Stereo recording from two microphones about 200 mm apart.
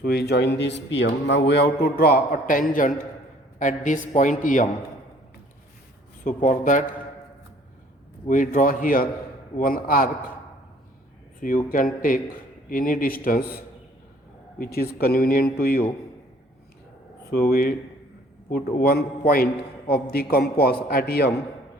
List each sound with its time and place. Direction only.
0.0 s a man's voice: 50° left (ahead or behind)
6.2 s a man's voice: 40° left (ahead or behind)
8.3 s a man's voice: 40° left (ahead or behind)
11.3 s a man's voice: 45° left (ahead or behind)
14.8 s a man's voice: 50° left (ahead or behind)
17.3 s a man's voice: 50° left (ahead or behind)